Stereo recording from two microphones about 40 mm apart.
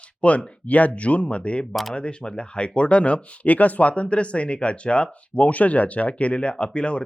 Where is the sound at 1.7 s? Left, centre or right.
Centre.